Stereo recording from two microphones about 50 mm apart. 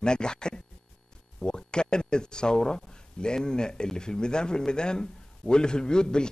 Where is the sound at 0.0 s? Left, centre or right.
Centre.